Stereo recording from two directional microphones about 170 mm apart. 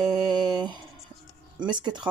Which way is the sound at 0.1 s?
25° right (ahead or behind).